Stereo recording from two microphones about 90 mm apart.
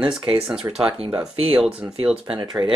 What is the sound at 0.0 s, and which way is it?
Speech, 5° right (ahead or behind).